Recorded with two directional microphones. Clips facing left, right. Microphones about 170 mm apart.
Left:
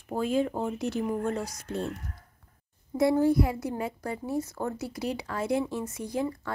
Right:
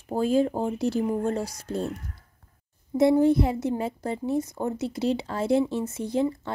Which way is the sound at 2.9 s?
20° right (ahead or behind).